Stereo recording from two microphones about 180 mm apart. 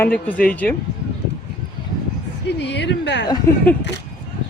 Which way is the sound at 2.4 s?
70° left (ahead or behind).